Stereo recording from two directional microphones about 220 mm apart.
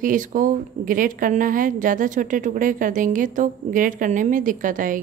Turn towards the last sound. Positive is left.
turn(degrees=-35)  # may be behind; listen again after turning